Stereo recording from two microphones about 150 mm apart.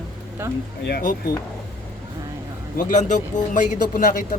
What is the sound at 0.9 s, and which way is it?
Speech, 90° left.